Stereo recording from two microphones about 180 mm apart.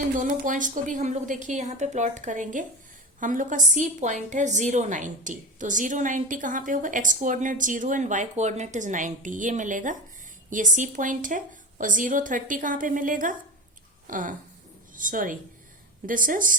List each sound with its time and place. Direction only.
0.2 s a woman's voice: 45° right (ahead or behind)